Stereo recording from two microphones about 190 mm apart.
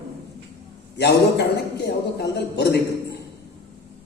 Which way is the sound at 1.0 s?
60° left (ahead or behind).